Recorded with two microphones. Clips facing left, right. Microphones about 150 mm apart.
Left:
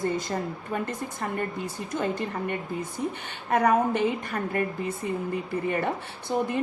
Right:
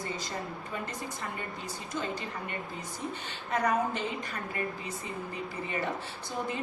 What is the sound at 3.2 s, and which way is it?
A woman's voice, 55° left (ahead or behind).